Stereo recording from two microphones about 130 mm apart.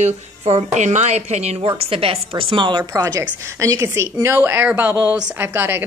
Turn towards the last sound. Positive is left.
turn(degrees=-20)  # may be behind; listen again after turning